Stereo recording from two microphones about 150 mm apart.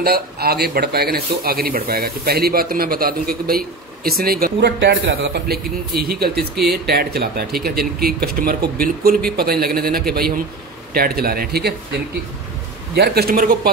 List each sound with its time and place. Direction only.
0.0 s speech: 90° right
9.4 s speech: 90° right
12.9 s speech: 90° right